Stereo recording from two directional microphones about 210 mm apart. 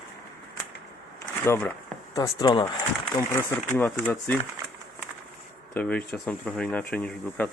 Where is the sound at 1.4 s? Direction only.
10° left (ahead or behind).